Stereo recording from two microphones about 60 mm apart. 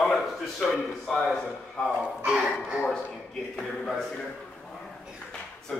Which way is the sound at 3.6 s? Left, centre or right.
Centre.